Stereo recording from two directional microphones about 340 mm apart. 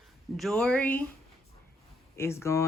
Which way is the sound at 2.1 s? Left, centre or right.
Centre.